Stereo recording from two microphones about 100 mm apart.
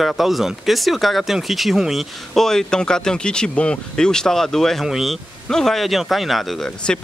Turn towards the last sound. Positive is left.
turn(degrees=10)  # may be behind; listen again after turning